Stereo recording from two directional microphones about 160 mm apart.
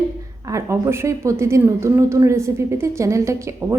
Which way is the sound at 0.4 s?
20° right (ahead or behind).